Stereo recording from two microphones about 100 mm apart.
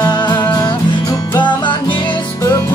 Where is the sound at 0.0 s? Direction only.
50° left (ahead or behind).